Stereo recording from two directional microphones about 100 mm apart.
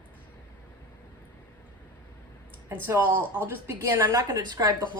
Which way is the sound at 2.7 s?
20° right (ahead or behind).